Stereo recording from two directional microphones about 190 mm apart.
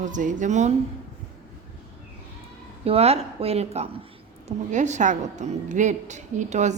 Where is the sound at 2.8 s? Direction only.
30° right (ahead or behind).